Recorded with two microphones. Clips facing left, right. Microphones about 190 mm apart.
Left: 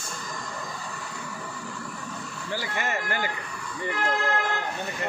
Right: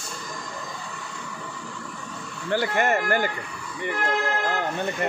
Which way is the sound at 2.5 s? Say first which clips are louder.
Right 8 dB; 55° right (ahead or behind).